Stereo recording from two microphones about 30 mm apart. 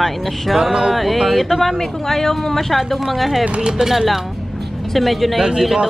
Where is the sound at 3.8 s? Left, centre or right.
Centre.